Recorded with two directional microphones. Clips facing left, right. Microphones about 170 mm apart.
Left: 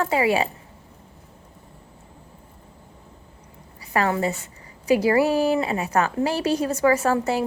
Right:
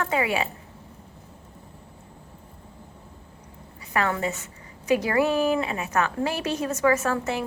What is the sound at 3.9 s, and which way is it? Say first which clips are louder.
A woman's voice: left 3 dB; 35° left (ahead or behind).